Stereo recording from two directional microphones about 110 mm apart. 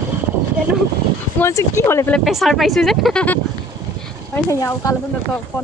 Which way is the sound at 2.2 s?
Centre (ahead or behind).